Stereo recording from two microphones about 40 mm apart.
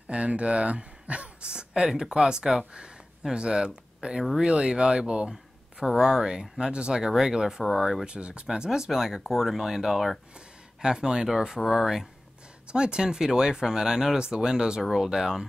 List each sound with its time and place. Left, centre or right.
0.1 s speech: right
1.9 s speech: centre
5.3 s speech: centre
7.0 s speech: centre
8.1 s speech: right; by 10.1 s centre
10.8 s speech: centre
12.6 s speech: right